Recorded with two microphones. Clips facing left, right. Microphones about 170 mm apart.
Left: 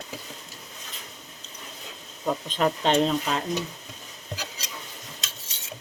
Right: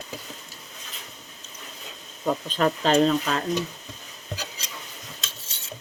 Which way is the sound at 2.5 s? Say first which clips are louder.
Right 1 dB; 10° left (ahead or behind).